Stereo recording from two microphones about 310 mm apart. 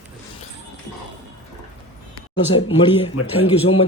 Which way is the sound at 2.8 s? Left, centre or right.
Centre.